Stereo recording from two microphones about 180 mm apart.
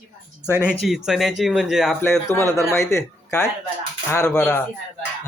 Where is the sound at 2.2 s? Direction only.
15° left (ahead or behind).